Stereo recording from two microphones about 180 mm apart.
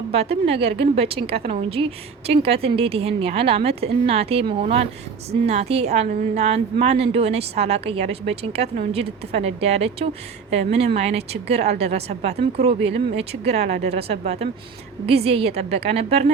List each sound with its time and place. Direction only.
0.1 s a woman's voice: 35° right (ahead or behind)